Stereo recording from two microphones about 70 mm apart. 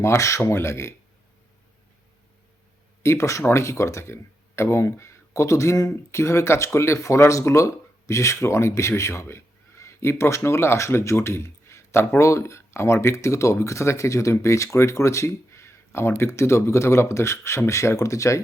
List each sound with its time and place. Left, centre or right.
0.0 s speech: left
3.0 s speech: left